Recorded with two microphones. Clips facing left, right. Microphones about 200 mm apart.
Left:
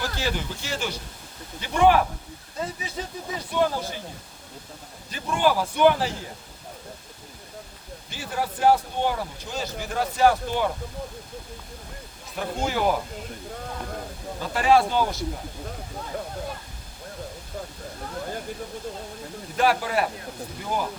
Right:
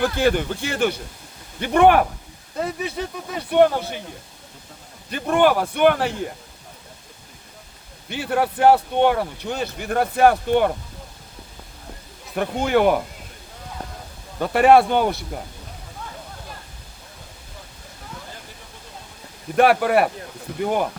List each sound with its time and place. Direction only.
0.0 s a man's voice: 55° right (ahead or behind)
5.1 s a man's voice: 60° right (ahead or behind)
8.1 s a man's voice: 65° right (ahead or behind)
12.3 s a man's voice: 65° right (ahead or behind)
14.3 s a man's voice: 65° right (ahead or behind)
19.5 s a man's voice: 65° right (ahead or behind)